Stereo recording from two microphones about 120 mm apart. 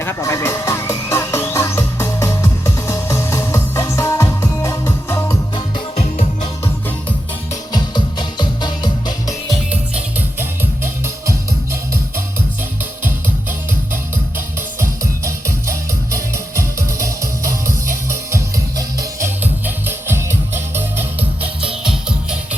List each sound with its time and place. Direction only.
0.0 s music: 20° left (ahead or behind)
7.7 s music: 40° left (ahead or behind)
10.2 s music: 20° right (ahead or behind)
14.8 s music: 25° right (ahead or behind)
19.4 s music: 15° right (ahead or behind)